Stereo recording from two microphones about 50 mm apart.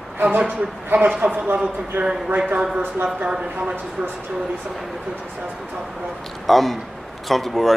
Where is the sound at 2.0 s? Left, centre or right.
Right.